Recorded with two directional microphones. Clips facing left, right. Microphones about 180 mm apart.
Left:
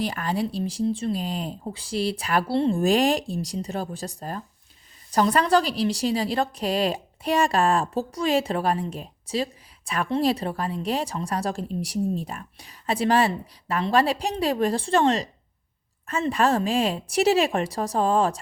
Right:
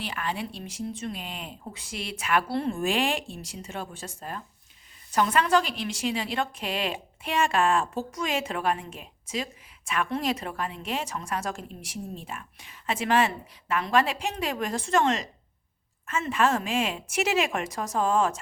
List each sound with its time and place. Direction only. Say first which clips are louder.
0.0 s a woman's voice: left 6 dB; 40° left (ahead or behind)
2.8 s a woman's voice: left 6 dB; 40° left (ahead or behind)